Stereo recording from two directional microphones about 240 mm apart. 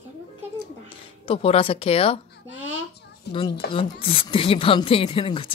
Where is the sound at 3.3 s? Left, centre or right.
Left.